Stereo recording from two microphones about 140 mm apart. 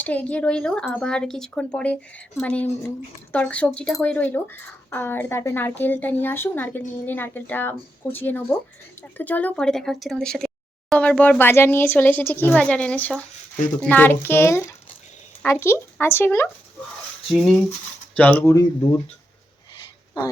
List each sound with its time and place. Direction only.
0.0 s speech: 10° left (ahead or behind)
18.2 s speech: 10° left (ahead or behind)
18.5 s speech: 25° left (ahead or behind)
19.7 s a sound: 30° left (ahead or behind)